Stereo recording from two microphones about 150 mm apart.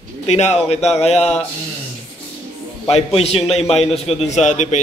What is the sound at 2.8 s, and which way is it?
A man's voice, 40° left (ahead or behind).